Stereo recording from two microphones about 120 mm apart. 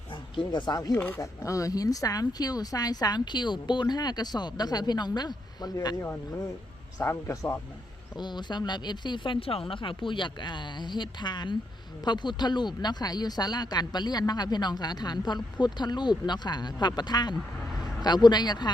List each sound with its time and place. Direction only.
0.1 s speech: 40° left (ahead or behind)
0.9 s speech: 20° left (ahead or behind)
7.0 s speech: 20° left (ahead or behind)
8.1 s speech: 40° left (ahead or behind)